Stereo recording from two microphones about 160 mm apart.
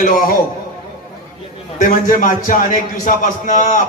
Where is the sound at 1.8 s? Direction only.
60° left (ahead or behind).